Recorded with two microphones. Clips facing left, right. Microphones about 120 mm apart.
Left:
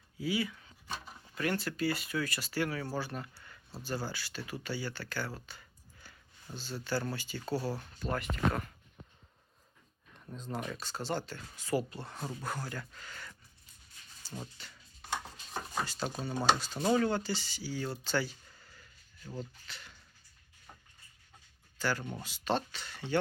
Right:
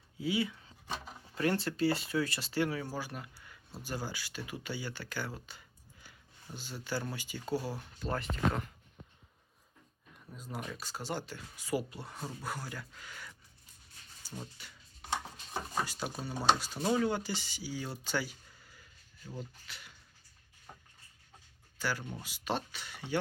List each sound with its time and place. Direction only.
0.2 s speech: 25° right (ahead or behind)
2.8 s speech: 10° right (ahead or behind)
8.0 s speech: 30° right (ahead or behind)
10.3 s speech: 10° right (ahead or behind)
14.2 s a sound: 10° right (ahead or behind)
16.8 s speech: 5° right (ahead or behind)
21.8 s speech: 5° right (ahead or behind)